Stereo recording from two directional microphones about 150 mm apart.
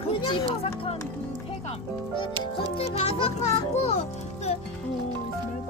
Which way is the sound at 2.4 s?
40° left (ahead or behind).